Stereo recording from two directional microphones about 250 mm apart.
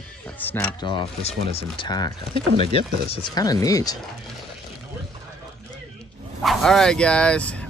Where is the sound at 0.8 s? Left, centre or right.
Left.